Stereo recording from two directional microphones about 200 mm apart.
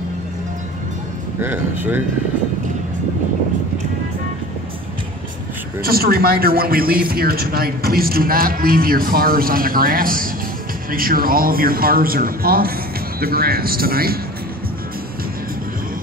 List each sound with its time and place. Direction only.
1.4 s speech: 10° right (ahead or behind)
5.8 s a man's voice: 50° right (ahead or behind)